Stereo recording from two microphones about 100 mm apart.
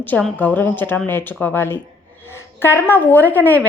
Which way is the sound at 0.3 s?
15° left (ahead or behind).